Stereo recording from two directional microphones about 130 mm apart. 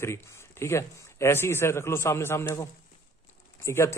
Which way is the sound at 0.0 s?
20° left (ahead or behind).